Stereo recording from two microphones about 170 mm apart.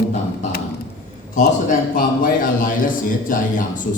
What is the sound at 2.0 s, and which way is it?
A man's voice, 50° left (ahead or behind).